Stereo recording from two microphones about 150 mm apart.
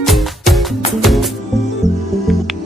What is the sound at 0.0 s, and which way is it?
Music, centre (ahead or behind).